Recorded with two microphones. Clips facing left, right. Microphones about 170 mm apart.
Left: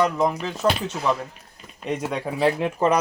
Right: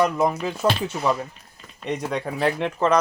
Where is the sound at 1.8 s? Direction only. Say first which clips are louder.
Even; 5° left (ahead or behind).